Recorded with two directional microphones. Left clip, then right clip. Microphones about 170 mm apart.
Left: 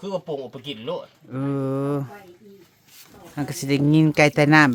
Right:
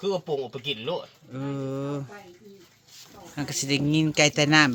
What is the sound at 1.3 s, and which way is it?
Mantra, 35° left (ahead or behind).